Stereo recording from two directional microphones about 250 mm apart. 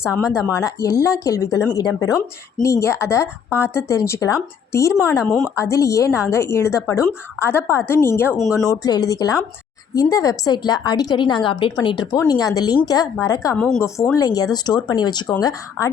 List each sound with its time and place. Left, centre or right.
0.2 s a woman's voice: centre
0.5 s speech: centre